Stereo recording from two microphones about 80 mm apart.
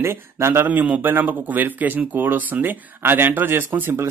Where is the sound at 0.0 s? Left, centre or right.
Right.